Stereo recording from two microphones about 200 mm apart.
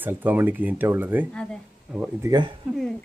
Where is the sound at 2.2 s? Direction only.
20° right (ahead or behind).